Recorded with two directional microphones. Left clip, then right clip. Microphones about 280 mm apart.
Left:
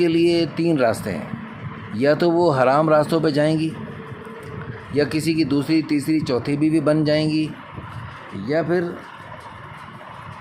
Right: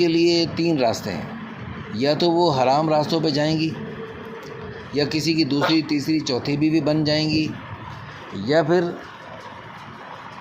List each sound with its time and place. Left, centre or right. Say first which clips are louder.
0.0 s speech: left 1 dB; centre
4.9 s speech: left 1 dB; centre